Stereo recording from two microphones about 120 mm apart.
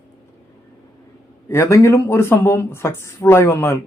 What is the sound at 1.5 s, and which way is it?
Speech, 25° left (ahead or behind).